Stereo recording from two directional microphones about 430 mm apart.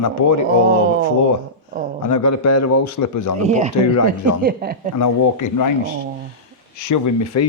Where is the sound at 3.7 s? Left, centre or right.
Left.